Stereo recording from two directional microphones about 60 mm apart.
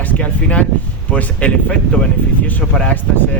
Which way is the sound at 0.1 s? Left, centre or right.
Left.